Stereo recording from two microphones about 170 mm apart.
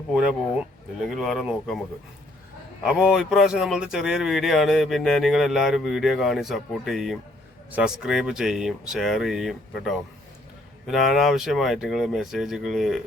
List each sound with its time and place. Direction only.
1.1 s speech: centre (ahead or behind)
2.8 s speech: 5° right (ahead or behind)